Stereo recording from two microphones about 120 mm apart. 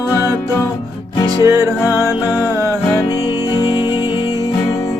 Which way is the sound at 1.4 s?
25° right (ahead or behind).